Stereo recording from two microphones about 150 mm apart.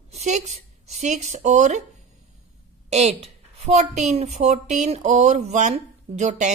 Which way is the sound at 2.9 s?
45° right (ahead or behind).